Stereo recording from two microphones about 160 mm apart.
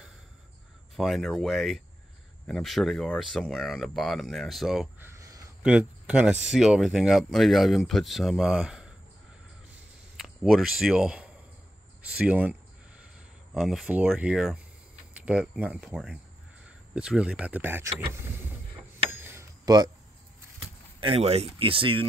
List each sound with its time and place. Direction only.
0.9 s speech: centre (ahead or behind)
4.9 s a sound: 15° right (ahead or behind)
5.6 s speech: 5° right (ahead or behind)
10.1 s speech: centre (ahead or behind)
13.6 s speech: centre (ahead or behind)
19.0 s a sound: 15° right (ahead or behind)
21.0 s speech: 35° right (ahead or behind)